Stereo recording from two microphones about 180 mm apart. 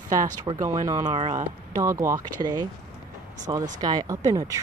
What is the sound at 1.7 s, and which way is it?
Speech, 15° right (ahead or behind).